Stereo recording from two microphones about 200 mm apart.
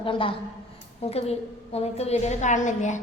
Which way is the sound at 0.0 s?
25° left (ahead or behind).